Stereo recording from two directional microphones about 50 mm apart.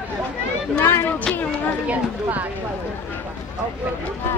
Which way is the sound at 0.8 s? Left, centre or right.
Left.